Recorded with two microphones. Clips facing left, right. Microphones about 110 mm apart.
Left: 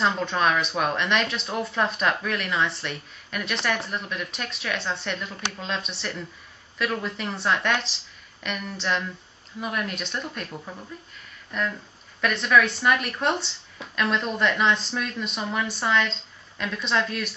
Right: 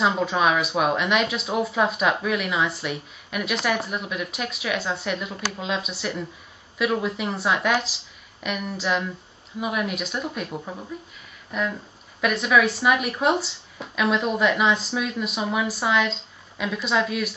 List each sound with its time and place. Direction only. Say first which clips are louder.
0.0 s a woman's voice: right 2 dB; 5° right (ahead or behind)
10.6 s speech: right 4 dB; 15° right (ahead or behind)
11.5 s a woman's voice: right 2 dB; 5° right (ahead or behind)